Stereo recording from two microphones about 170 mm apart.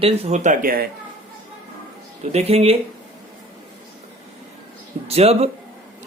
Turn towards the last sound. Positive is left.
turn(degrees=-35)  # may be behind; listen again after turning